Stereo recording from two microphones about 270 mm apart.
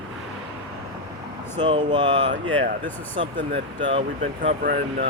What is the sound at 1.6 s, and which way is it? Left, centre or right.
Speech, centre.